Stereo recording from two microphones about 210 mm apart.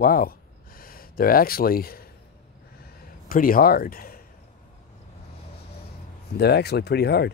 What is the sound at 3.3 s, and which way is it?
Speech, 40° left (ahead or behind).